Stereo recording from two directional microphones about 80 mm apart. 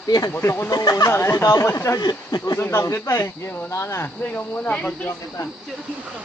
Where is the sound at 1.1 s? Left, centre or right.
Left.